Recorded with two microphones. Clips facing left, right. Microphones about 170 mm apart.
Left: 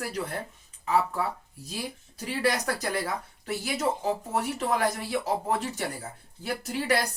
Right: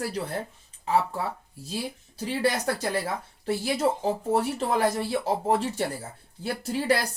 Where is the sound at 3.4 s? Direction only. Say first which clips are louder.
Right 4 dB; 30° right (ahead or behind).